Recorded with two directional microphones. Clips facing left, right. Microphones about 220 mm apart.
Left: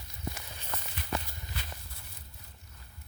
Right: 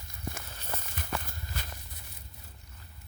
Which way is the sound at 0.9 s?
50° right (ahead or behind).